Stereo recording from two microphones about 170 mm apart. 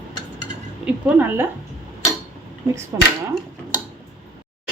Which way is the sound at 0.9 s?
10° right (ahead or behind).